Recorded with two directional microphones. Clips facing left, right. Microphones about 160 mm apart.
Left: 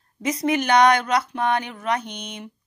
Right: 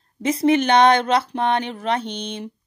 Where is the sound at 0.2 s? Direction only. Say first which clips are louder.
Right 5 dB; 30° right (ahead or behind).